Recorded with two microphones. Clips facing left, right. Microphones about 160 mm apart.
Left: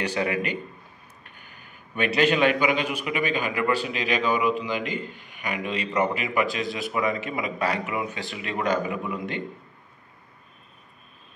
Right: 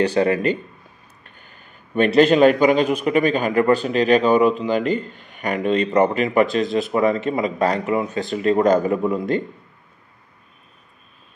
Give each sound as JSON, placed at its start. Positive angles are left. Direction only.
{"t": 0.1, "sound": "a man's voice", "side_deg": -35}
{"t": 2.0, "sound": "a man's voice", "side_deg": -40}